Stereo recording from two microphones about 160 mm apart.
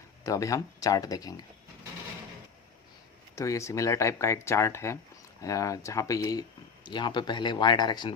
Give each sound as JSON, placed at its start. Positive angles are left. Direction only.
{"t": 0.3, "sound": "speech", "side_deg": 20}
{"t": 3.3, "sound": "speech", "side_deg": 20}